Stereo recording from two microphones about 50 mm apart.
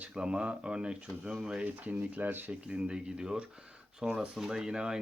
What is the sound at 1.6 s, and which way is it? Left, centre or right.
Speech, right.